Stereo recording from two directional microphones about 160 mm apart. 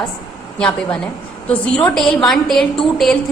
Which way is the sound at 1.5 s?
5° left (ahead or behind).